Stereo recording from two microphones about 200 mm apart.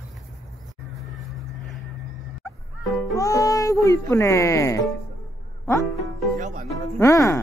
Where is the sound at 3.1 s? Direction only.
15° left (ahead or behind).